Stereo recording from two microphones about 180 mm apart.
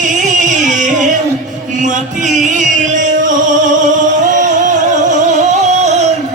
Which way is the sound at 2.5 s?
45° right (ahead or behind).